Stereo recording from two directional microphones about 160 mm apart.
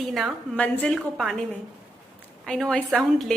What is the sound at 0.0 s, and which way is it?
A woman's voice, centre (ahead or behind).